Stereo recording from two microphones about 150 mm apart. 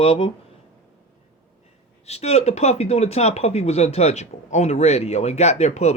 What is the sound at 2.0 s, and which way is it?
Speech, 45° left (ahead or behind).